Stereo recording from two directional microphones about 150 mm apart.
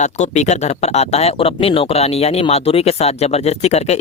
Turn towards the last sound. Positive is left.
turn(degrees=45)  # may be behind; listen again after turning